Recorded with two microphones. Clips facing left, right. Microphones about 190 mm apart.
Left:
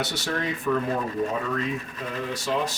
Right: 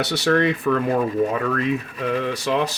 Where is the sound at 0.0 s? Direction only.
70° right (ahead or behind).